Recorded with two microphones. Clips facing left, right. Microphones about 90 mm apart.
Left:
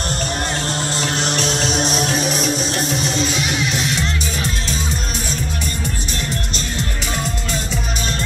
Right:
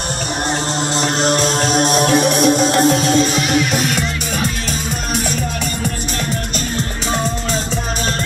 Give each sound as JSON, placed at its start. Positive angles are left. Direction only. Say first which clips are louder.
{"t": 1.0, "sound": "music", "louder": "right 6 dB", "side_deg": -40}